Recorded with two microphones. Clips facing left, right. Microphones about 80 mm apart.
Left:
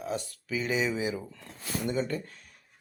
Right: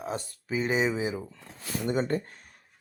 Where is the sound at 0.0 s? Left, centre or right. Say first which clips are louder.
Even; right.